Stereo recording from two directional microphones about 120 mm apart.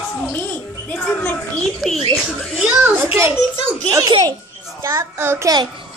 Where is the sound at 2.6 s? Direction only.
15° right (ahead or behind).